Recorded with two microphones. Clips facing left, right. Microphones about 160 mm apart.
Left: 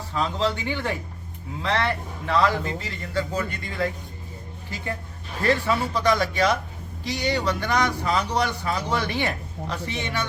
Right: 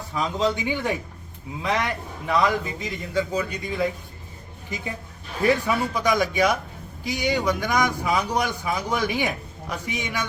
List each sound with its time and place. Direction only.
0.1 s speech: 15° right (ahead or behind)